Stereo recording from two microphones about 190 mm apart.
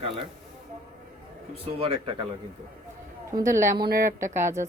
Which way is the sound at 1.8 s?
30° right (ahead or behind).